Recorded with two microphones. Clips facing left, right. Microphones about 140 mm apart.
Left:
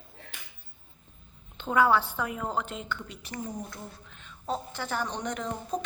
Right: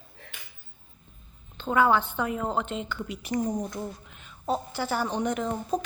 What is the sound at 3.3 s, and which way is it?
Speech, 40° right (ahead or behind).